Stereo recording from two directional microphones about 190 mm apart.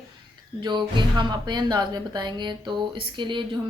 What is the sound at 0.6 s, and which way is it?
A woman's voice, 25° right (ahead or behind).